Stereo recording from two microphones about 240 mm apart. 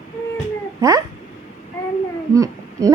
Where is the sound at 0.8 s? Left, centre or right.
Centre.